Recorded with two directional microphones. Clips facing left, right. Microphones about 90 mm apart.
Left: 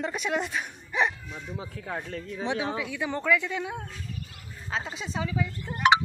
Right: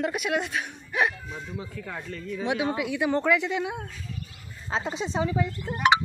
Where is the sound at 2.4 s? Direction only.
15° right (ahead or behind).